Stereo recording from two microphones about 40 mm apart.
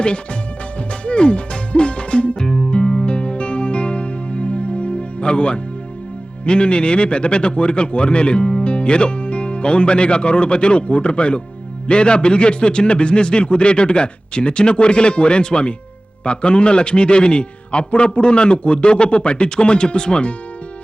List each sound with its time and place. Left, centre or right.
1.0 s speech: left
2.4 s music: left
6.4 s speech: left